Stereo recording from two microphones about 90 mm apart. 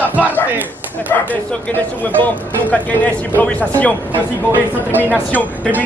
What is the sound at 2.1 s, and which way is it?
Speech, 15° left (ahead or behind).